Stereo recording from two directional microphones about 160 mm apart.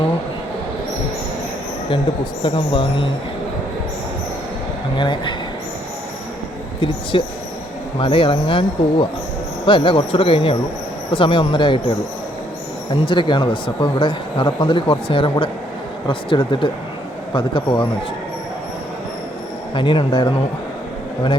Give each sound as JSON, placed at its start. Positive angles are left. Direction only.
{"t": 2.4, "sound": "speech", "side_deg": 30}
{"t": 4.9, "sound": "speech", "side_deg": 30}
{"t": 6.7, "sound": "speech", "side_deg": 30}
{"t": 19.7, "sound": "speech", "side_deg": 30}